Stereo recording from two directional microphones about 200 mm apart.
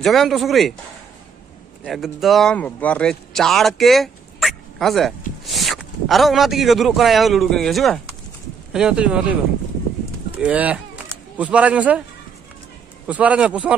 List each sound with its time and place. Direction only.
0.0 s speech: centre (ahead or behind)
1.9 s speech: centre (ahead or behind)
10.4 s a man's voice: 5° right (ahead or behind)
13.0 s speech: 5° right (ahead or behind)